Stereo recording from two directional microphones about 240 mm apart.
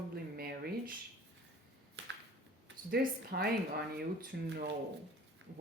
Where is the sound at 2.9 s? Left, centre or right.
Right.